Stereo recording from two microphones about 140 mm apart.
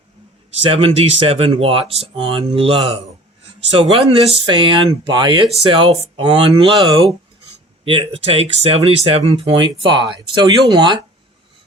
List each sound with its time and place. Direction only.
0.7 s speech: 40° right (ahead or behind)